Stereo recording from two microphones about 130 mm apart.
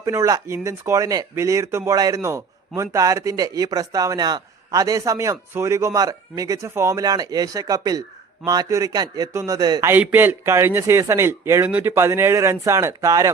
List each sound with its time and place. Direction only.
0.0 s speech: 25° right (ahead or behind)
9.9 s speech: 15° right (ahead or behind)